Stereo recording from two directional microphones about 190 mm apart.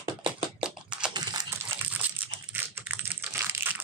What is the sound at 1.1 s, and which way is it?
Computer keyboard, 20° right (ahead or behind).